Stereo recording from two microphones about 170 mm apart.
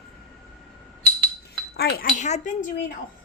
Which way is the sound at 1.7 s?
65° left (ahead or behind).